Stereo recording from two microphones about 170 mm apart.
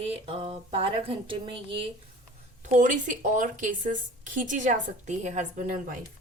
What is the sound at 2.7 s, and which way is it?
A woman's voice, 50° right (ahead or behind).